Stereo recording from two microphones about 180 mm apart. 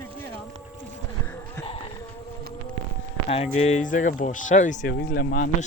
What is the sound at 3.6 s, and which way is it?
Speech, 40° left (ahead or behind).